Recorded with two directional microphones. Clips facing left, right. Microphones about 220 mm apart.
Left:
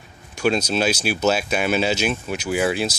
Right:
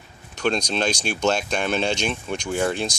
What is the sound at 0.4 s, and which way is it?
Speech, 5° left (ahead or behind).